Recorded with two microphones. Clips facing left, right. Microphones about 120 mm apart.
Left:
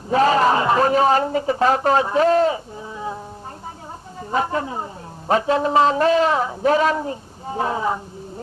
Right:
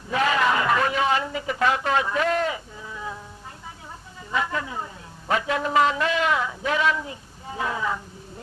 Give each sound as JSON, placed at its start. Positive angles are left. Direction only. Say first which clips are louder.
{"t": 0.1, "sound": "a man's voice", "louder": "left 6 dB", "side_deg": 35}
{"t": 4.3, "sound": "a man's voice", "louder": "left 5 dB", "side_deg": 35}